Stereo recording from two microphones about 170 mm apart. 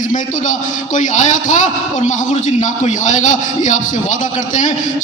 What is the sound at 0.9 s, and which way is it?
A man's voice, 45° left (ahead or behind).